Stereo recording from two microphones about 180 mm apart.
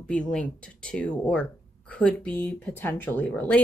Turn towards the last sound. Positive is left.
turn(degrees=5)  # may be behind; listen again after turning